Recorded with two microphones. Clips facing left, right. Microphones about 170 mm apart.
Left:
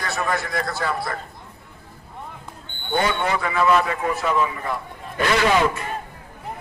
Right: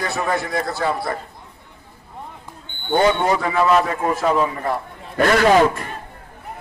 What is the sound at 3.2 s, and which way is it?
A man's voice, 35° right (ahead or behind).